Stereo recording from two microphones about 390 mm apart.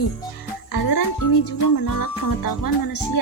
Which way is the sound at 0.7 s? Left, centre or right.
Left.